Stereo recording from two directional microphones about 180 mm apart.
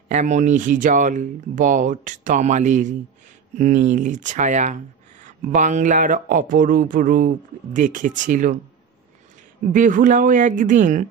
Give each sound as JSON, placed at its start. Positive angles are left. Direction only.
{"t": 0.1, "sound": "speech", "side_deg": -40}
{"t": 9.7, "sound": "speech", "side_deg": -45}